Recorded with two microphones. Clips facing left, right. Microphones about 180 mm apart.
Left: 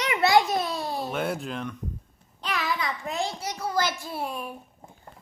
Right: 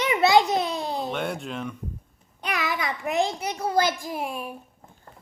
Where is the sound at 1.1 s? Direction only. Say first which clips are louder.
Even; centre (ahead or behind).